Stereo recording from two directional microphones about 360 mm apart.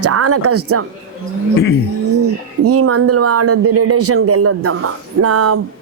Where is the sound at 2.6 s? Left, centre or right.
Right.